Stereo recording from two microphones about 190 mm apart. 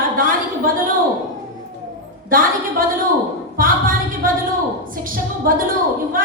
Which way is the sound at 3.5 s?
50° right (ahead or behind).